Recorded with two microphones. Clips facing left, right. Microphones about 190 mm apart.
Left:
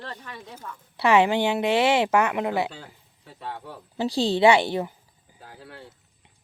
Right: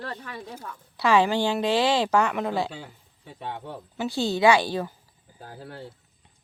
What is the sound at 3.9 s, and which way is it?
Speech, 30° left (ahead or behind).